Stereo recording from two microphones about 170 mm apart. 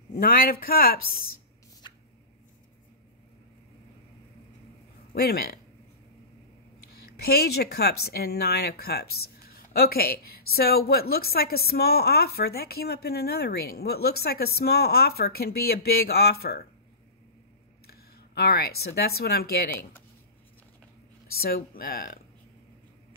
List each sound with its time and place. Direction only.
0.1 s speech: 60° left (ahead or behind)
5.1 s speech: 65° left (ahead or behind)
7.1 s speech: 65° left (ahead or behind)
17.8 s speech: 65° left (ahead or behind)
21.3 s speech: 65° left (ahead or behind)